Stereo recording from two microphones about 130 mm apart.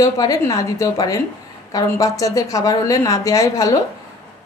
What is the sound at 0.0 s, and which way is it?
Speech, 25° left (ahead or behind).